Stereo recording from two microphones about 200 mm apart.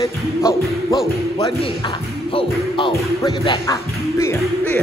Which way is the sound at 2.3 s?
20° left (ahead or behind).